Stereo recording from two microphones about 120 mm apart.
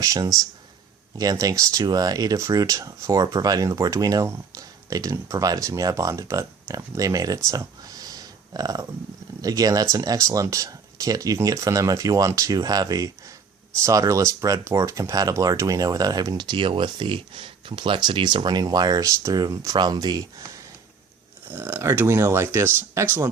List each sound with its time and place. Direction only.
0.0 s speech: 30° right (ahead or behind)
7.5 s a sound: 30° right (ahead or behind)
9.4 s speech: 30° right (ahead or behind)
21.4 s speech: 20° right (ahead or behind)